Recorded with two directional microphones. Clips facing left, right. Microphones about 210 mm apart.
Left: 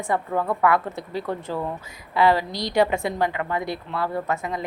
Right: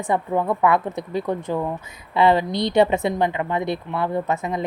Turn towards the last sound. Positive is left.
turn(degrees=-20)  # may be behind; listen again after turning